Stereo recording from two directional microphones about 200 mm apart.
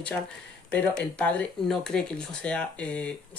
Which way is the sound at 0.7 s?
5° left (ahead or behind).